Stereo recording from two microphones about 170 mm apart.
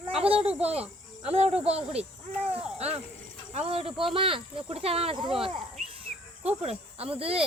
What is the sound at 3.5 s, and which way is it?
Speech, 35° right (ahead or behind).